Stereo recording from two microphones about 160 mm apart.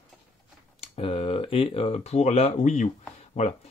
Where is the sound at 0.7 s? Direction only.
35° left (ahead or behind).